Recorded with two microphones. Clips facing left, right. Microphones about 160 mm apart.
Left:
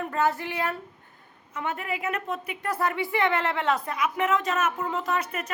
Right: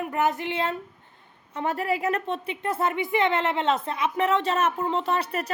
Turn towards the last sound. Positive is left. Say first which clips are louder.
# right 3 dB
turn(degrees=-35)  # may be behind; listen again after turning